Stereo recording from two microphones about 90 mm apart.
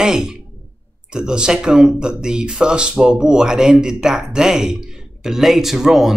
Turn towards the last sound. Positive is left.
turn(degrees=-5)  # may be behind; listen again after turning